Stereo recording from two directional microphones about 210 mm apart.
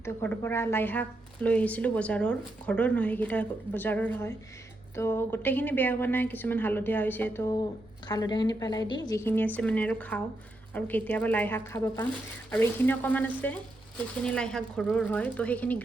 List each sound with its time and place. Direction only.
0.0 s a woman's voice: 10° left (ahead or behind)